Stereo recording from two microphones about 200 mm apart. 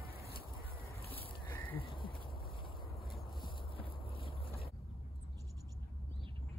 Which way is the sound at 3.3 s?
25° left (ahead or behind).